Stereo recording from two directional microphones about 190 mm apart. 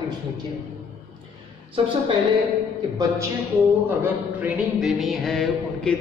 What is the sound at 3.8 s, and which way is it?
Music, 10° right (ahead or behind).